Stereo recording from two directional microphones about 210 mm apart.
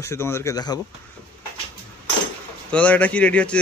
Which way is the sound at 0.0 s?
10° left (ahead or behind).